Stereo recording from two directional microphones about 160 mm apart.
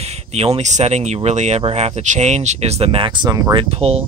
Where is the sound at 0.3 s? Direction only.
40° right (ahead or behind); by 3.6 s 25° right (ahead or behind).